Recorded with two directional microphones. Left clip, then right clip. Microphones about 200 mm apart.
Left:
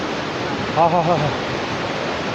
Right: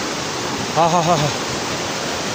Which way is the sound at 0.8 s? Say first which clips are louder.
Even; 30° right (ahead or behind).